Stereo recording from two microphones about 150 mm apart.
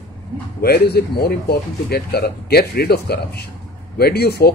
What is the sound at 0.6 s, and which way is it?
A man's voice, 90° left.